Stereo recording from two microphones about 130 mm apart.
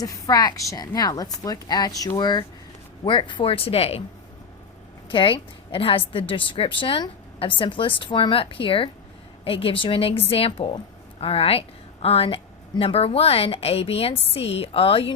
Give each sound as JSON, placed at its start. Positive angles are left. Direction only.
{"t": 0.0, "sound": "a woman's voice", "side_deg": 30}
{"t": 5.0, "sound": "a woman's voice", "side_deg": 40}